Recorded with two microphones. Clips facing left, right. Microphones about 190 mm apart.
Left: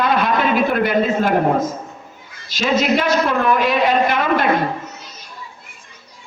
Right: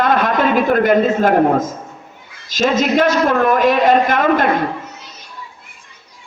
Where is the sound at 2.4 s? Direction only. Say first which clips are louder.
Right 2 dB; 45° right (ahead or behind).